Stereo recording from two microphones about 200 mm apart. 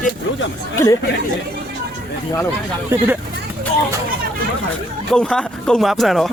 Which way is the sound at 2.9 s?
10° right (ahead or behind).